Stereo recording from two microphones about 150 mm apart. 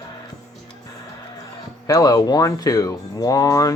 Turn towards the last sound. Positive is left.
turn(degrees=20)  # may be behind; listen again after turning